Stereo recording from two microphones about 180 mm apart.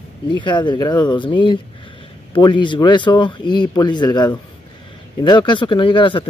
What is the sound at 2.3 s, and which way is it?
Speech, 25° left (ahead or behind).